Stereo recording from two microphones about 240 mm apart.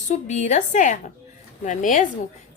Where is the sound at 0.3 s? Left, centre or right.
Left.